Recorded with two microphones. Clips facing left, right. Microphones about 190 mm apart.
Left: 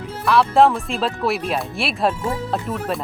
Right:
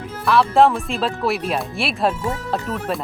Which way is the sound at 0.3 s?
Centre (ahead or behind).